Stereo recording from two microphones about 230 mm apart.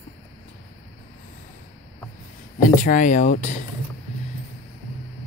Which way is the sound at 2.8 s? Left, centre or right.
Left.